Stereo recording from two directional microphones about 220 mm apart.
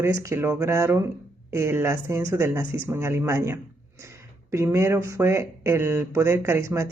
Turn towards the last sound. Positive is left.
turn(degrees=-10)  # may be behind; listen again after turning